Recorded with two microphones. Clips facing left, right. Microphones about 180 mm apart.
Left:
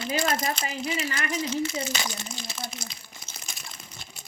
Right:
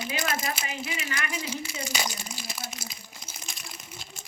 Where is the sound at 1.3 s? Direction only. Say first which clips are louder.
Left 6 dB; 10° right (ahead or behind).